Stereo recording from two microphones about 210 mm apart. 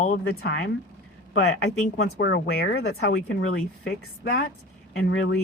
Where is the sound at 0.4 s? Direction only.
50° left (ahead or behind).